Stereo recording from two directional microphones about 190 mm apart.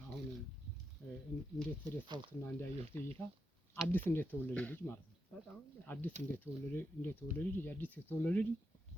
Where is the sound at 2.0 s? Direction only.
25° right (ahead or behind).